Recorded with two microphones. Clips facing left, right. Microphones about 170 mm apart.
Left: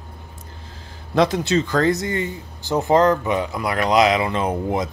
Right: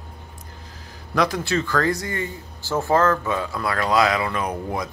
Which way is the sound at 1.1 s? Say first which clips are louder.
Left 4 dB; 25° left (ahead or behind).